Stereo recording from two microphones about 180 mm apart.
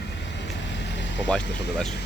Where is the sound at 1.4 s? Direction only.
70° left (ahead or behind).